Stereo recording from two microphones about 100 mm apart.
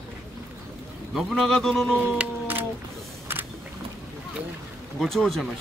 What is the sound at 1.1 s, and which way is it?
Speech, 5° left (ahead or behind).